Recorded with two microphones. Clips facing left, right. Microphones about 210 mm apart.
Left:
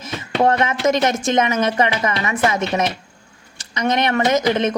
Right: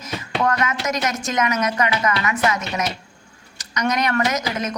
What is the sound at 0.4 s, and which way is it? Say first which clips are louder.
Speech: left 6 dB; 30° left (ahead or behind).